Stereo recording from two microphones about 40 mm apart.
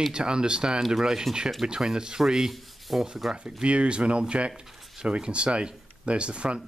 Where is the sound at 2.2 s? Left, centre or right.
Centre.